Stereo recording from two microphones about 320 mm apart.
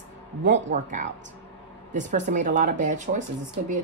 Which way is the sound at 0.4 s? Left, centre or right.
Right.